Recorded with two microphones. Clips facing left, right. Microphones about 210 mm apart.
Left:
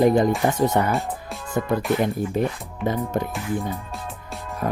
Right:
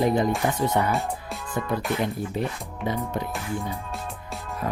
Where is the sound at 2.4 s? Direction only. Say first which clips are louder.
Left 5 dB; 50° left (ahead or behind).